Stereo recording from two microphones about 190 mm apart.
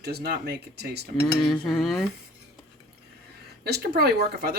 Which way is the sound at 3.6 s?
55° right (ahead or behind).